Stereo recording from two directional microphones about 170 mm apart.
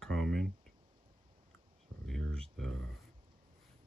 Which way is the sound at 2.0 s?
5° left (ahead or behind).